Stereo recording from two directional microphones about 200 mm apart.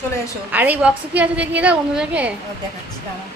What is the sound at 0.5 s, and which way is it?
A woman's voice, 10° right (ahead or behind).